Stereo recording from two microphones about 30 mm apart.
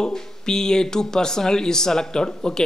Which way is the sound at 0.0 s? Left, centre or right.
Centre.